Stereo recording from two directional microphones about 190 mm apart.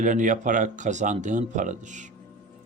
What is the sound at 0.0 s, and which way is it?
Speech, 40° right (ahead or behind).